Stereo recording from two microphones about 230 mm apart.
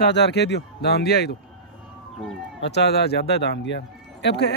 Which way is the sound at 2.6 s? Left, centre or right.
Left.